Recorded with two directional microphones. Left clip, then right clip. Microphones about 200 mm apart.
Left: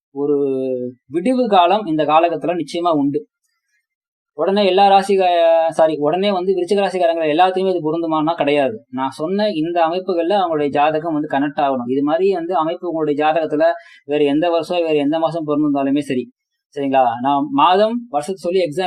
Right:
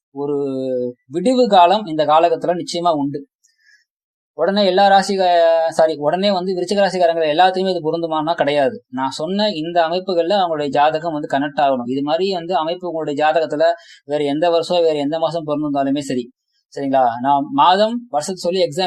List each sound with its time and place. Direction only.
0.2 s speech: 30° right (ahead or behind)
4.4 s speech: 25° right (ahead or behind)